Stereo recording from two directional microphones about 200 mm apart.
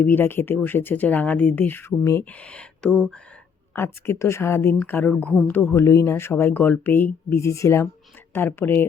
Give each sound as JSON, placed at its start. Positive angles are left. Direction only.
{"t": 0.0, "sound": "speech", "side_deg": 10}